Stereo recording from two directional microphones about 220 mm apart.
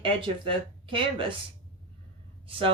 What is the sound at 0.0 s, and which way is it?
Speech, 25° right (ahead or behind).